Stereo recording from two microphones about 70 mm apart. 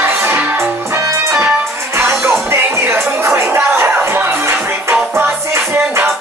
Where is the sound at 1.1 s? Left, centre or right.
Right.